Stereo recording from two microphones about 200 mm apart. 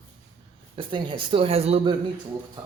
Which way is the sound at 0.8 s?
25° right (ahead or behind).